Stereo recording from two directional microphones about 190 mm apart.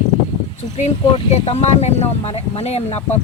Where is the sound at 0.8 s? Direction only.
35° left (ahead or behind).